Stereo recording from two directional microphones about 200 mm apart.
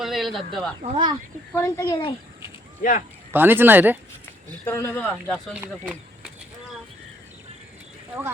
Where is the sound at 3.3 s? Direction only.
10° right (ahead or behind).